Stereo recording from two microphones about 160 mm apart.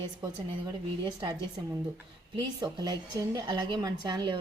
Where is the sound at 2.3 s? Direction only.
25° right (ahead or behind).